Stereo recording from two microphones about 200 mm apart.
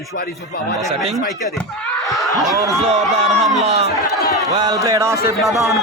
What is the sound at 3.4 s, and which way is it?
Speech, centre (ahead or behind).